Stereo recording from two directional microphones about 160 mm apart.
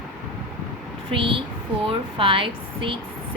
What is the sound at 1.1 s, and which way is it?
A woman's voice, 35° right (ahead or behind).